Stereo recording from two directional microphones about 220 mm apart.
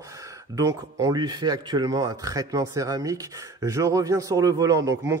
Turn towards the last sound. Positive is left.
turn(degrees=-15)  # may be behind; listen again after turning